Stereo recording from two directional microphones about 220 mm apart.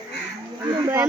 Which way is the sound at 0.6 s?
15° right (ahead or behind).